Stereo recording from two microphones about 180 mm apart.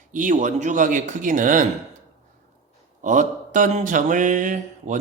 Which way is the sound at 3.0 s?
45° right (ahead or behind).